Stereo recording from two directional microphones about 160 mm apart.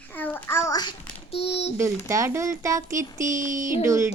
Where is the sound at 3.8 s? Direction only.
20° right (ahead or behind).